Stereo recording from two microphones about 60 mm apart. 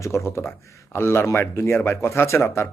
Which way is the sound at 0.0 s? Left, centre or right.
Left.